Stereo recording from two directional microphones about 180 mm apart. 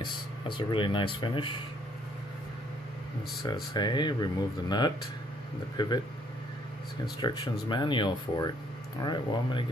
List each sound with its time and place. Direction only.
0.0 s speech: 25° left (ahead or behind)
3.7 s speech: 25° left (ahead or behind)
7.2 s speech: 25° left (ahead or behind)